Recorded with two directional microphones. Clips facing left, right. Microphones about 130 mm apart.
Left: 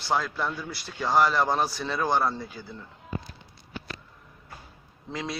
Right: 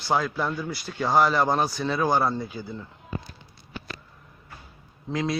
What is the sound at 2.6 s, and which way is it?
Speech, 15° right (ahead or behind).